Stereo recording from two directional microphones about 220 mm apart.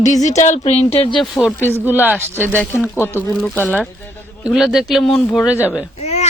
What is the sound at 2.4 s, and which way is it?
A woman's voice, 10° left (ahead or behind).